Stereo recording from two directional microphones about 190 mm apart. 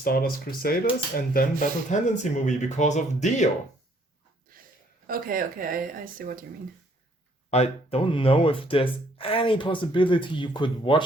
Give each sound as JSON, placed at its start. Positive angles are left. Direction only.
{"t": 0.0, "sound": "speech", "side_deg": 50}
{"t": 5.0, "sound": "speech", "side_deg": -50}
{"t": 7.5, "sound": "speech", "side_deg": 30}